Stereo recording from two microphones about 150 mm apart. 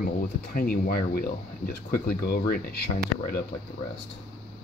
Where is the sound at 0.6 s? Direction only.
75° left (ahead or behind).